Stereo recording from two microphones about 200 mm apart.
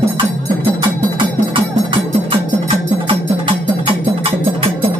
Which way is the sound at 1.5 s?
25° right (ahead or behind).